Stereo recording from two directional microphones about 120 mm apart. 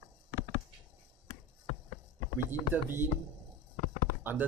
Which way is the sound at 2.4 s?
15° right (ahead or behind).